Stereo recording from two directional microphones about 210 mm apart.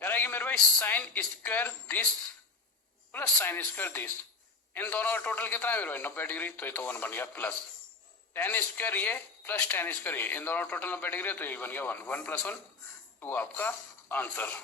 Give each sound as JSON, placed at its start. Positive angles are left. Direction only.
{"t": 0.0, "sound": "speech", "side_deg": 10}
{"t": 3.1, "sound": "speech", "side_deg": 10}